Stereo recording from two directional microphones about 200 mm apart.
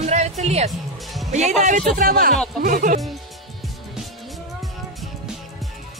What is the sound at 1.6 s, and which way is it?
Speech, 40° right (ahead or behind).